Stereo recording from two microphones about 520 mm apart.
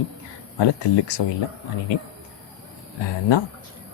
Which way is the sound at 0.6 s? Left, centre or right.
Left.